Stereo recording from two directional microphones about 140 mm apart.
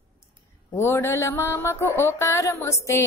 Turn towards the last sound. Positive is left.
turn(degrees=20)  # may be behind; listen again after turning